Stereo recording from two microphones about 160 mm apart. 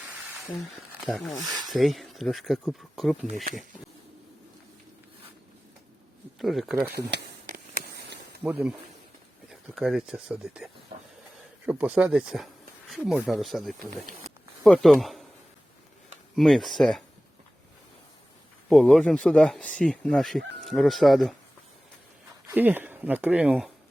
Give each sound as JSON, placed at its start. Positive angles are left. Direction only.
{"t": 1.0, "sound": "speech", "side_deg": 0}
{"t": 6.4, "sound": "speech", "side_deg": 0}
{"t": 8.4, "sound": "speech", "side_deg": -10}
{"t": 13.7, "sound": "speech", "side_deg": -60}
{"t": 14.6, "sound": "speech", "side_deg": 0}
{"t": 16.3, "sound": "speech", "side_deg": 0}
{"t": 18.7, "sound": "speech", "side_deg": 5}
{"t": 22.4, "sound": "speech", "side_deg": -10}